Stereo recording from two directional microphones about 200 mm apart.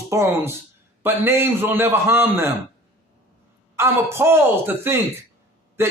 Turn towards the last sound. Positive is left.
turn(degrees=-10)  # may be behind; listen again after turning